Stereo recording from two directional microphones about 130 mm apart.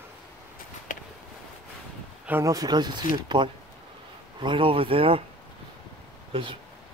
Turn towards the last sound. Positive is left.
turn(degrees=-40)  # may be behind; listen again after turning